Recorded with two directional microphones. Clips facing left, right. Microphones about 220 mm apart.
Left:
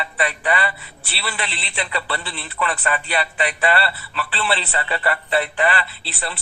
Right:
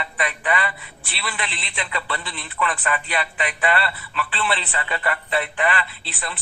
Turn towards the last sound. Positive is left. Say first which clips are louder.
# left 3 dB
turn(degrees=35)  # may be behind; listen again after turning